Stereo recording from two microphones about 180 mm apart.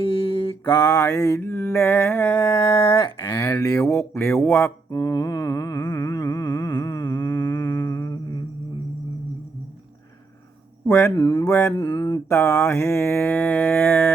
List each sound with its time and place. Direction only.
0.0 s mantra: 30° left (ahead or behind); by 2.4 s 15° left (ahead or behind)
2.4 s a sound: 25° left (ahead or behind)
3.2 s mantra: 15° left (ahead or behind)
4.4 s humming: 15° left (ahead or behind)
10.8 s mantra: 15° left (ahead or behind)